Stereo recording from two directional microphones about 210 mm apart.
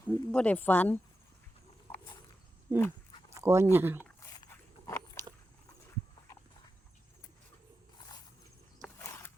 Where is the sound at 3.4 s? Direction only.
15° right (ahead or behind).